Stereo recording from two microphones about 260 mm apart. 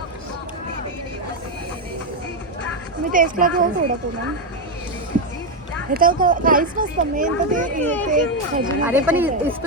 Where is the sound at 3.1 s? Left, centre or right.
Right.